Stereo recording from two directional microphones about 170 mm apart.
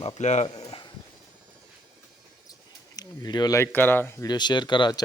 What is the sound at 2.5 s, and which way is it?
Speech, 20° left (ahead or behind).